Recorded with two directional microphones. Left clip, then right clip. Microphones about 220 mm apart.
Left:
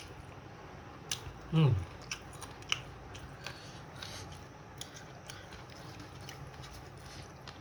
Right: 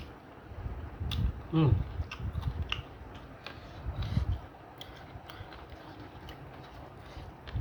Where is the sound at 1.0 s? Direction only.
5° right (ahead or behind).